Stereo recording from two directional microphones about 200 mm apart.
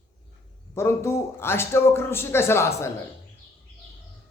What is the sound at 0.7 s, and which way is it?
A man's voice, 10° left (ahead or behind).